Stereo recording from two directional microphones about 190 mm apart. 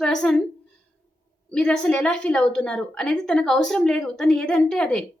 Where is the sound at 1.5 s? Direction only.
5° left (ahead or behind).